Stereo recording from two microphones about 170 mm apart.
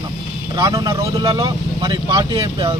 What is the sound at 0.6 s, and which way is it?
Speech, 20° right (ahead or behind).